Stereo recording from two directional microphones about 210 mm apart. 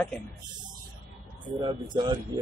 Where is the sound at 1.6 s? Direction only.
20° right (ahead or behind).